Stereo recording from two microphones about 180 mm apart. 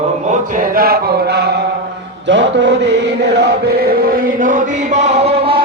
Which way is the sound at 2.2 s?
90° right.